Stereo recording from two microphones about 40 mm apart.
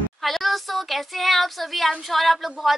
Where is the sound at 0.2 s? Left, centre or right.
Centre.